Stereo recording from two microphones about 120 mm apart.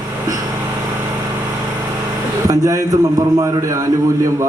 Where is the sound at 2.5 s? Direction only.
30° right (ahead or behind).